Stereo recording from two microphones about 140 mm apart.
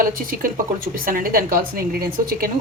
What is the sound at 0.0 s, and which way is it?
A woman's voice, 85° right.